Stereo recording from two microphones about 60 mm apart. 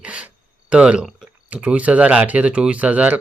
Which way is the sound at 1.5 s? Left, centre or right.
Right.